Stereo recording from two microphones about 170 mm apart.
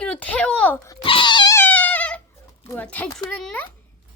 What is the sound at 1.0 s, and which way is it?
Cat, 30° left (ahead or behind).